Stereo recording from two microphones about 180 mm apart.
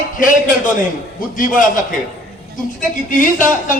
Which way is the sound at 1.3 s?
50° left (ahead or behind).